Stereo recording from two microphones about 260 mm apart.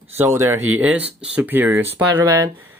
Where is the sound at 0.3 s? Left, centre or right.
Centre.